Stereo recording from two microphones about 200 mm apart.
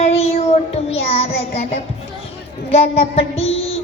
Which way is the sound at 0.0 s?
30° left (ahead or behind).